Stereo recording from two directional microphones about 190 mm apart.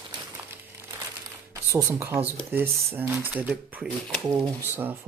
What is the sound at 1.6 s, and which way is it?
Speech, 10° right (ahead or behind).